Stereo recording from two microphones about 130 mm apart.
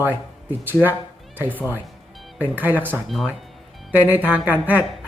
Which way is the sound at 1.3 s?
15° right (ahead or behind).